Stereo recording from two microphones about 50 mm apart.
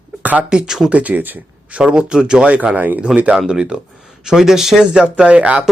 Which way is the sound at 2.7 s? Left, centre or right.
Right.